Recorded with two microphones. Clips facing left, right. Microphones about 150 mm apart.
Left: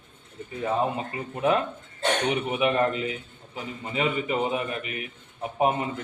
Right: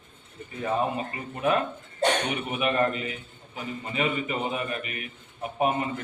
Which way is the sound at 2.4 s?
20° left (ahead or behind).